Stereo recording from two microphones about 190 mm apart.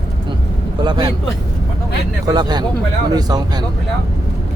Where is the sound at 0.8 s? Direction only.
25° right (ahead or behind).